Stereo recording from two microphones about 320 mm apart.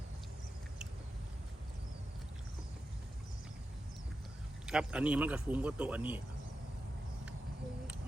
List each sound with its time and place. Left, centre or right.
4.6 s a man's voice: centre